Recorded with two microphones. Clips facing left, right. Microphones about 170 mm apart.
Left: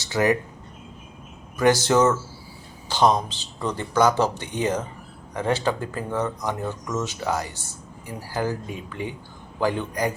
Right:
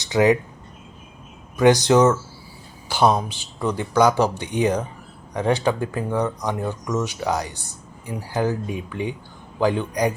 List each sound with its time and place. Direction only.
0.0 s speech: 20° right (ahead or behind)
1.5 s speech: 15° right (ahead or behind)